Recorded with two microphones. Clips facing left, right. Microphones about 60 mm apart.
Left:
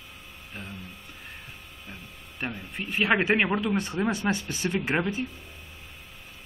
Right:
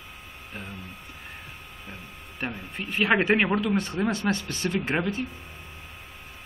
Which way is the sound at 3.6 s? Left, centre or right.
Centre.